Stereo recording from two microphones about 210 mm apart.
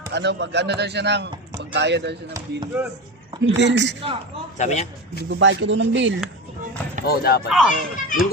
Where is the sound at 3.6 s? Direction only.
60° right (ahead or behind).